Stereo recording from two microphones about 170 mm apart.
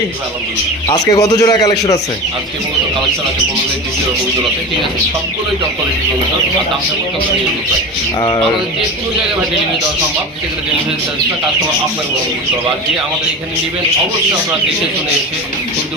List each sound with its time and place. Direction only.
1.1 s a man's voice: 20° left (ahead or behind)
8.2 s a man's voice: 25° left (ahead or behind)